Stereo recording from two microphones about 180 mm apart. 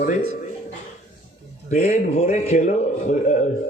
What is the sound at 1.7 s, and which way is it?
A man's voice, 35° left (ahead or behind).